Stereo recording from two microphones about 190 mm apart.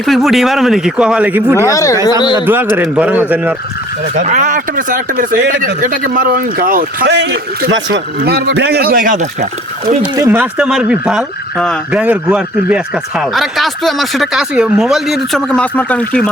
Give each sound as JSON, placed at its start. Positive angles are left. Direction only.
{"t": 0.0, "sound": "speech", "side_deg": 0}
{"t": 1.5, "sound": "speech", "side_deg": 15}
{"t": 2.7, "sound": "speech", "side_deg": -10}
{"t": 4.1, "sound": "speech", "side_deg": -40}
{"t": 10.2, "sound": "speech", "side_deg": -10}